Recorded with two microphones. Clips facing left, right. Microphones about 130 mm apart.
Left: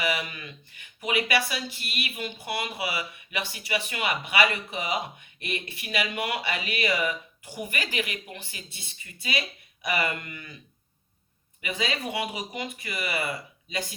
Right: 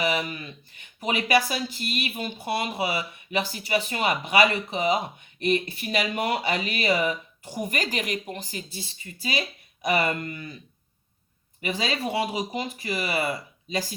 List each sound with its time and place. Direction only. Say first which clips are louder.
0.0 s speech: right 3 dB; 35° right (ahead or behind)
11.6 s speech: right 3 dB; 35° right (ahead or behind)